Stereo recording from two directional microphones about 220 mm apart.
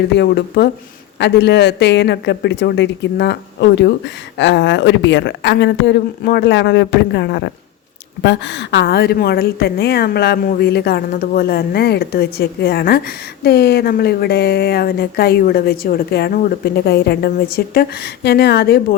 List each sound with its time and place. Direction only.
0.2 s a woman's voice: 50° left (ahead or behind)